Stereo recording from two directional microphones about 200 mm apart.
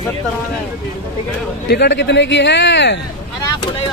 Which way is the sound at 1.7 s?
60° left (ahead or behind).